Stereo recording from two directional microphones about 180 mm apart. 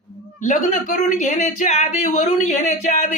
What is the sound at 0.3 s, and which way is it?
Speech, 45° left (ahead or behind).